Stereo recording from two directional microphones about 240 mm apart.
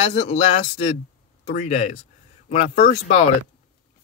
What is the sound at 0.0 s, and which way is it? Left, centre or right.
Speech, left.